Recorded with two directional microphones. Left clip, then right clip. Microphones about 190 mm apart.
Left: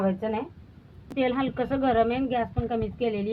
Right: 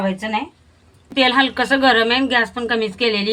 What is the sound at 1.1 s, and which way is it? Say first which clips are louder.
A woman's voice: right 11 dB; 20° right (ahead or behind).